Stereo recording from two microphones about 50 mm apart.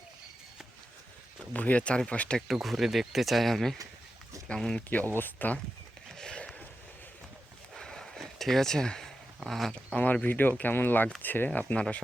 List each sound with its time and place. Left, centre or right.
1.5 s speech: left
2.5 s speech: centre
5.1 s speech: left
6.1 s a sound: centre
7.8 s a sound: centre
9.5 s speech: centre
9.9 s speech: left
10.2 s speech: left
11.4 s speech: left